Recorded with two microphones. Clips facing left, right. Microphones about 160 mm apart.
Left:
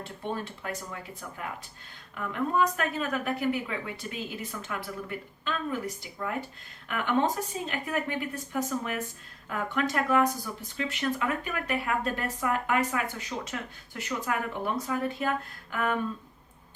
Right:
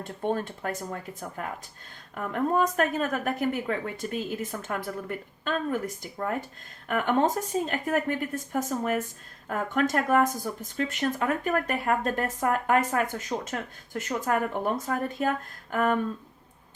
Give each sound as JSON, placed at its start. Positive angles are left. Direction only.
{"t": 0.0, "sound": "speech", "side_deg": -45}